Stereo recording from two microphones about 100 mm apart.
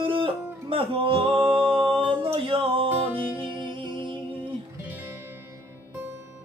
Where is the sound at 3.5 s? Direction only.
50° right (ahead or behind).